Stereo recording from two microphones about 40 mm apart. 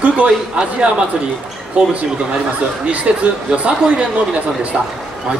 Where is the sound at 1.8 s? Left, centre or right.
Right.